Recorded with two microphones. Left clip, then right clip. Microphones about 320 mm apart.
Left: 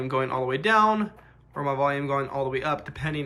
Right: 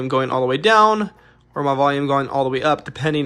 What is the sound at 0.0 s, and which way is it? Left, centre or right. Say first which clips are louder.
Speech: right 7 dB; centre.